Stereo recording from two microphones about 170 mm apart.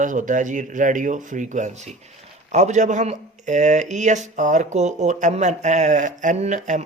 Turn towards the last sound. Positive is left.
turn(degrees=-45)  # may be behind; listen again after turning